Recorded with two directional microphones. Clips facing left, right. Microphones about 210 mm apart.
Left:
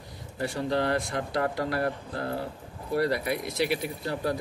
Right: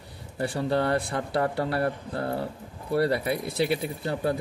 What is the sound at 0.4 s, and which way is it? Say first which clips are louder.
Speech: right 2 dB; 30° right (ahead or behind).